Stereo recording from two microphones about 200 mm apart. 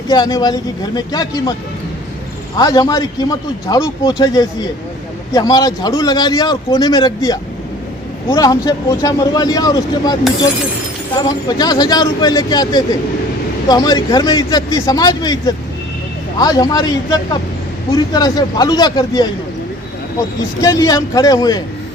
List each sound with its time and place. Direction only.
0.1 s speech: 20° left (ahead or behind)
2.6 s speech: 20° left (ahead or behind)
20.6 s speech: 15° left (ahead or behind)